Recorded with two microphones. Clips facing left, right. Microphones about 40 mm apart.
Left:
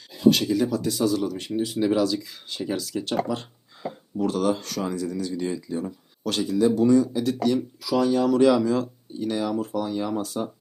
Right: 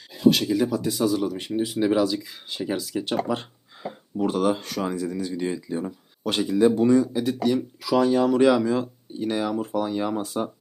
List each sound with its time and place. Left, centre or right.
0.1 s speech: centre
7.8 s speech: right